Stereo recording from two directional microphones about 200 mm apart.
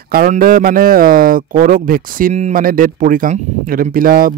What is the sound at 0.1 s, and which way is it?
A man's voice, 45° right (ahead or behind).